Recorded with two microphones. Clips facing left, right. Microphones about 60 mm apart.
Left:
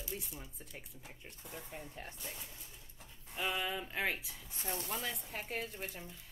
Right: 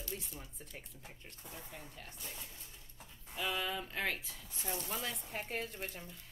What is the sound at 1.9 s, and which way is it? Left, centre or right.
Speech, left.